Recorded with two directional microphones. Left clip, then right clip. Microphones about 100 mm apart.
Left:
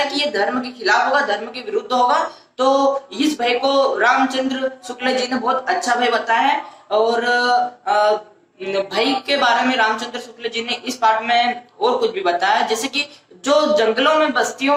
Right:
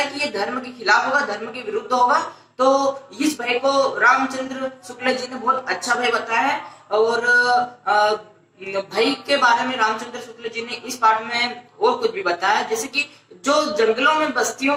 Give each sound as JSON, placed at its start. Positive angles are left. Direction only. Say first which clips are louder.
{"t": 0.1, "sound": "a woman's voice", "louder": "left 5 dB", "side_deg": 45}